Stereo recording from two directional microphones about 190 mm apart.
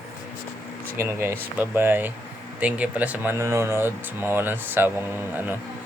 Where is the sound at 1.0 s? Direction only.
15° right (ahead or behind).